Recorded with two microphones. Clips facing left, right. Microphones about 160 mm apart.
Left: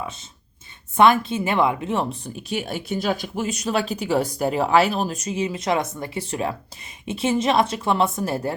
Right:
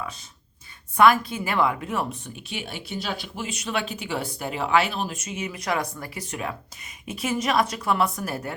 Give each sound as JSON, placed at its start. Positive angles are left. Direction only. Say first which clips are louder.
{"t": 0.0, "sound": "speech", "louder": "left 3 dB", "side_deg": 25}